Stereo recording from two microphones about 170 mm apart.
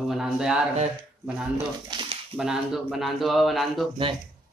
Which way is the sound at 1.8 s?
30° right (ahead or behind).